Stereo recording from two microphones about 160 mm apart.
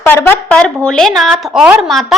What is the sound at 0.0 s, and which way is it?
A woman's voice, 15° left (ahead or behind).